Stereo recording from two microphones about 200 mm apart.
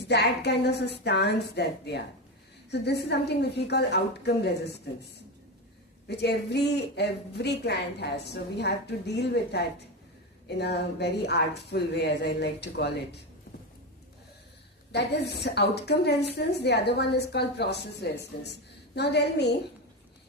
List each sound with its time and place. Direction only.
0.1 s speech: 55° left (ahead or behind)
6.1 s speech: 55° left (ahead or behind)
14.9 s speech: 55° left (ahead or behind)